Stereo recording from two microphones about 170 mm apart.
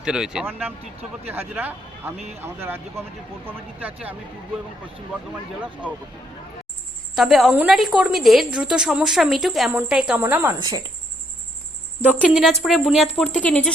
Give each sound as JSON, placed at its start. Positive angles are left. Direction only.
{"t": 0.0, "sound": "a woman's voice", "side_deg": -5}
{"t": 7.2, "sound": "a woman's voice", "side_deg": 0}
{"t": 10.6, "sound": "speech", "side_deg": -20}
{"t": 12.3, "sound": "a woman's voice", "side_deg": 0}